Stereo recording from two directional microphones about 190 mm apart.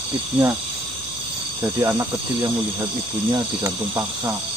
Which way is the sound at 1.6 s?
15° right (ahead or behind).